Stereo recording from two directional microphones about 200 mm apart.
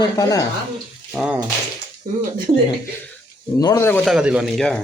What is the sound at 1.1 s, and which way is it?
Speech, 5° right (ahead or behind).